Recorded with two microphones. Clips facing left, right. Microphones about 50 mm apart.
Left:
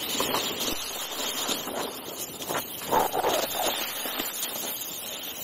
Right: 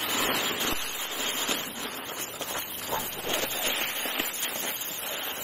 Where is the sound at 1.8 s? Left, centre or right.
Right.